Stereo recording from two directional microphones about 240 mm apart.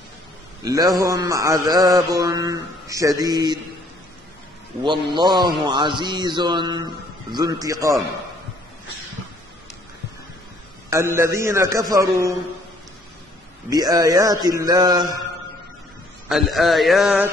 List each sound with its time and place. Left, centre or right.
0.7 s mantra: centre
4.8 s a man's voice: centre
7.3 s mantra: centre
10.9 s mantra: centre
13.7 s mantra: centre
16.3 s a man's voice: centre